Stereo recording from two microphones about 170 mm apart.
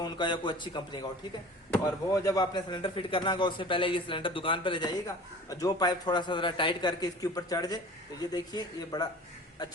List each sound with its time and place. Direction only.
0.0 s speech: 25° left (ahead or behind)